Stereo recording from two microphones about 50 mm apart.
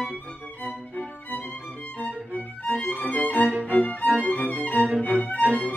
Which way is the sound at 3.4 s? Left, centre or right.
Right.